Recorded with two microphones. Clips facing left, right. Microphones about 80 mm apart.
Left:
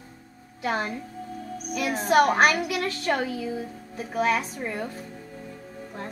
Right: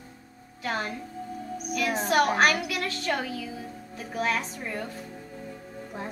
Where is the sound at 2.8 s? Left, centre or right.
Left.